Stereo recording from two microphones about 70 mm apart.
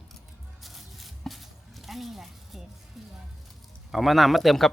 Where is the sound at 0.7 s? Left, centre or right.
Centre.